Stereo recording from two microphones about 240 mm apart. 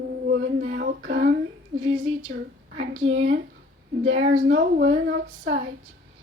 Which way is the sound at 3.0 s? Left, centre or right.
Right.